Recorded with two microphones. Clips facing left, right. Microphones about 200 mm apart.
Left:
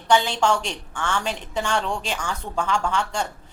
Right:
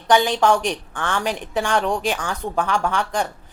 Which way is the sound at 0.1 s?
15° right (ahead or behind).